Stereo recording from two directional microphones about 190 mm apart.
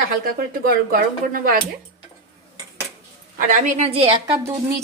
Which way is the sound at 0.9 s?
50° right (ahead or behind).